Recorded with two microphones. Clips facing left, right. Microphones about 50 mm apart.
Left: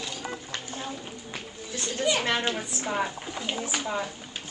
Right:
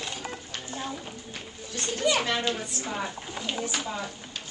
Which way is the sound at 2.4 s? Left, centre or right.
Left.